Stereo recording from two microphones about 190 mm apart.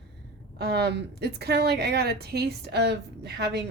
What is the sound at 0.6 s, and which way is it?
A woman's voice, 60° right (ahead or behind).